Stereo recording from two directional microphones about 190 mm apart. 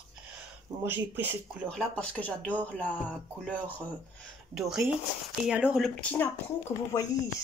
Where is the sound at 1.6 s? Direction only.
5° left (ahead or behind).